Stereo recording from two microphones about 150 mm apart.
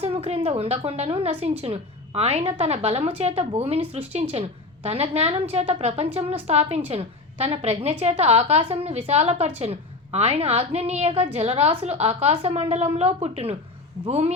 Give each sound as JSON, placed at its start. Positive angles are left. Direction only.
{"t": 0.0, "sound": "a woman's voice", "side_deg": -40}